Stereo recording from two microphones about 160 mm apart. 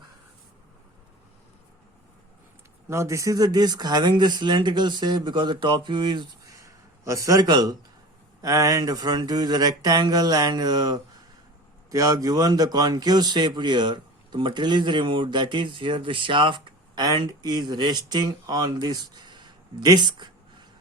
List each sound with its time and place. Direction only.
2.9 s a man's voice: 20° right (ahead or behind)